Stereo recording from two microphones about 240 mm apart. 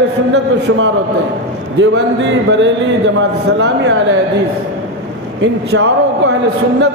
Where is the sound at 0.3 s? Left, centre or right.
Right.